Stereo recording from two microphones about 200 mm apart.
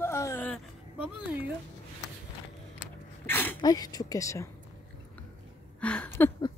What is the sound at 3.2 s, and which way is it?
Speech, 10° left (ahead or behind).